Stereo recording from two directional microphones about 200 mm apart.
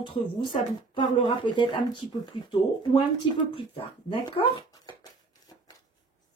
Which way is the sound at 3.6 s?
25° left (ahead or behind).